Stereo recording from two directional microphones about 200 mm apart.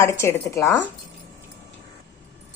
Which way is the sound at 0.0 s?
15° left (ahead or behind).